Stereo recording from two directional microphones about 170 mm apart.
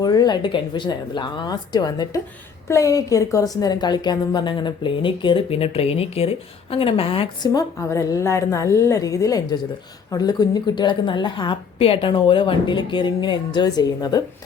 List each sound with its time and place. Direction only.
0.0 s a woman's voice: 25° left (ahead or behind)